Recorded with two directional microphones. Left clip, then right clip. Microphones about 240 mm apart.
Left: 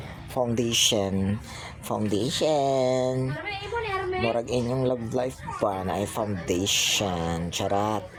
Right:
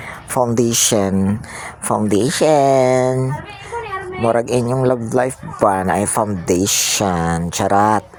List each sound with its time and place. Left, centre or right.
0.3 s speech: right